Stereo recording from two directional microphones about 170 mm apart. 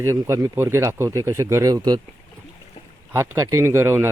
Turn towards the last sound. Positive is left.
turn(degrees=-15)  # may be behind; listen again after turning